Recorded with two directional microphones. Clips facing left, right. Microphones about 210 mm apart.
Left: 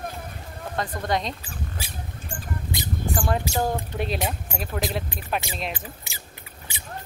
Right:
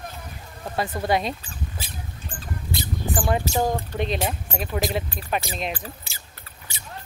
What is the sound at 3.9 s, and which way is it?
Speech, 5° left (ahead or behind).